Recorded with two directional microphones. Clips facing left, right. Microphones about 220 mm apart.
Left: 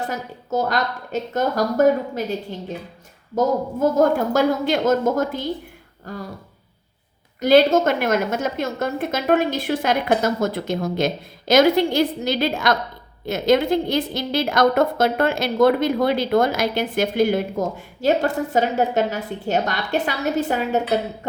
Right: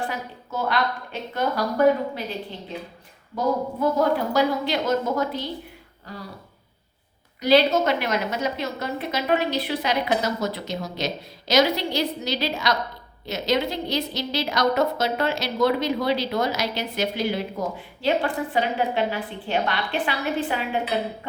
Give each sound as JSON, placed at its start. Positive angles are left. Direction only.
{"t": 0.0, "sound": "a woman's voice", "side_deg": 40}
{"t": 3.3, "sound": "a woman's voice", "side_deg": 45}
{"t": 7.4, "sound": "a woman's voice", "side_deg": 50}